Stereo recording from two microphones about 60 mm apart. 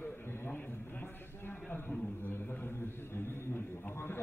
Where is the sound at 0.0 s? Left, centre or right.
Left.